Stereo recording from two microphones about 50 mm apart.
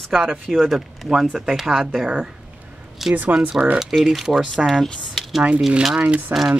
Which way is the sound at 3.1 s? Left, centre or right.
Right.